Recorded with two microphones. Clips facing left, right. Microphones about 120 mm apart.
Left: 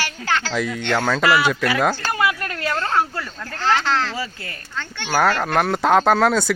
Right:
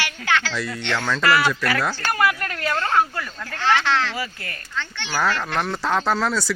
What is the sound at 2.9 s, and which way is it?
Speech, 30° left (ahead or behind).